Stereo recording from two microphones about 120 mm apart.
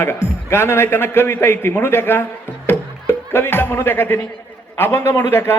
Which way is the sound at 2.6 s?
20° left (ahead or behind).